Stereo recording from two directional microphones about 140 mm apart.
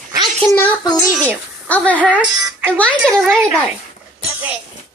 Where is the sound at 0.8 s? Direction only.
30° left (ahead or behind).